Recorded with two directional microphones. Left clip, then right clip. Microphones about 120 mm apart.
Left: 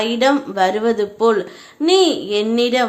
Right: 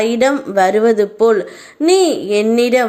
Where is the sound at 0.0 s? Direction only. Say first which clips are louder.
Right 2 dB; 35° right (ahead or behind).